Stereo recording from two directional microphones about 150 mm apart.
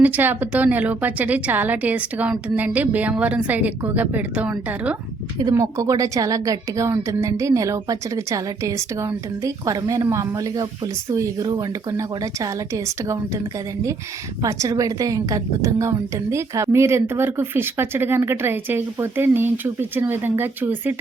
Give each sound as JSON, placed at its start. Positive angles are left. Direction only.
{"t": 0.0, "sound": "a woman's voice", "side_deg": -10}
{"t": 5.4, "sound": "a woman's voice", "side_deg": -25}
{"t": 14.4, "sound": "a woman's voice", "side_deg": -25}